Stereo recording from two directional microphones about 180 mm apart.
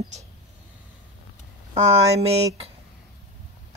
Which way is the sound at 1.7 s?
35° right (ahead or behind).